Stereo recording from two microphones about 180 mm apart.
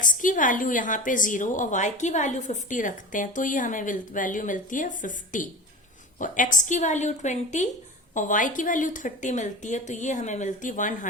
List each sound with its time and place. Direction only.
0.0 s a woman's voice: 45° left (ahead or behind)